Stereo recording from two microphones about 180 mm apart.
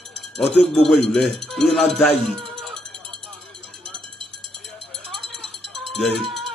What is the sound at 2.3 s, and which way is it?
Music, centre (ahead or behind).